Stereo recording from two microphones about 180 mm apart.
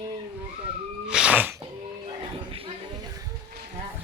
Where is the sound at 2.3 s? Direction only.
30° right (ahead or behind).